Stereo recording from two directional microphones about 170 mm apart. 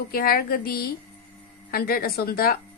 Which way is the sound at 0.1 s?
60° left (ahead or behind).